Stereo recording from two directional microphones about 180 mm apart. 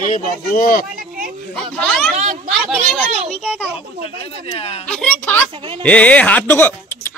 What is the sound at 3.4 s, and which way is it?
Speech, 5° left (ahead or behind).